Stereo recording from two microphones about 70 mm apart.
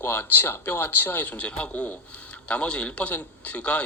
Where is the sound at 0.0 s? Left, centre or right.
Left.